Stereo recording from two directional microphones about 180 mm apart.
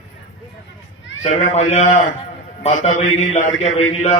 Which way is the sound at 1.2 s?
40° left (ahead or behind).